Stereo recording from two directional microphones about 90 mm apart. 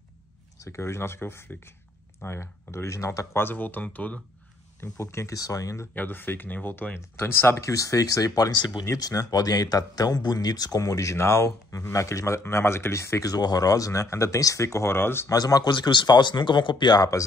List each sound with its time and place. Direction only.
0.6 s speech: 30° left (ahead or behind)
4.7 s speech: 30° left (ahead or behind)
5.9 s speech: 20° left (ahead or behind)
13.3 s speech: 45° left (ahead or behind); by 15.2 s 25° left (ahead or behind)
15.2 s speech: 45° left (ahead or behind)